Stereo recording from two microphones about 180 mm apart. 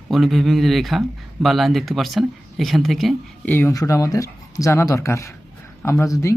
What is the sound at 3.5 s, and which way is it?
Speech, 15° left (ahead or behind).